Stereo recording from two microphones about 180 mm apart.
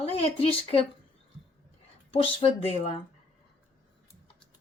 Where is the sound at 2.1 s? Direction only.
35° left (ahead or behind).